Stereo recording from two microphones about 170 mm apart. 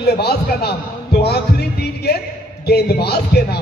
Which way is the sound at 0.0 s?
70° left (ahead or behind).